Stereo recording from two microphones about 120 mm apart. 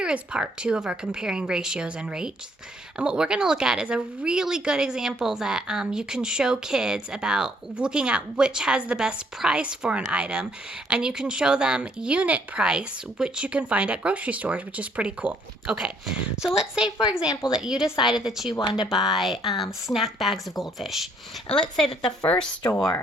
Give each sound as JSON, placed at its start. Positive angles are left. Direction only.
{"t": 0.0, "sound": "a woman's voice", "side_deg": -10}
{"t": 18.6, "sound": "speech", "side_deg": 35}
{"t": 18.9, "sound": "a woman's voice", "side_deg": 0}
{"t": 22.3, "sound": "speech", "side_deg": 10}